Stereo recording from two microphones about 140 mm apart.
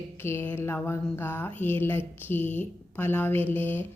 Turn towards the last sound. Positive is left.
turn(degrees=15)  # may be behind; listen again after turning